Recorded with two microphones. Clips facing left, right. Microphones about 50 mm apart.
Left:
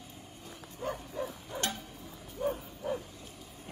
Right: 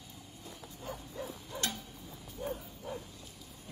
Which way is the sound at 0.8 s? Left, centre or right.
Left.